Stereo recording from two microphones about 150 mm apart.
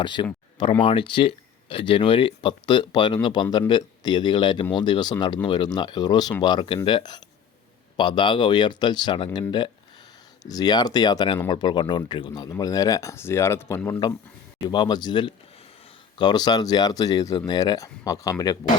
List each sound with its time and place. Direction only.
0.0 s speech: 30° left (ahead or behind); by 14.0 s 15° left (ahead or behind)
14.7 s speech: 30° left (ahead or behind)